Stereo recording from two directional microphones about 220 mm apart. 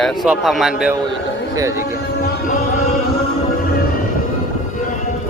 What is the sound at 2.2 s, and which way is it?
Music, 45° left (ahead or behind).